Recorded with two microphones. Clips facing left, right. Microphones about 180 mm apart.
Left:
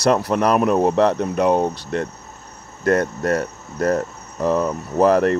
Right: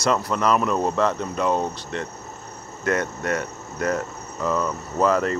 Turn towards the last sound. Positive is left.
turn(degrees=60)  # may be behind; listen again after turning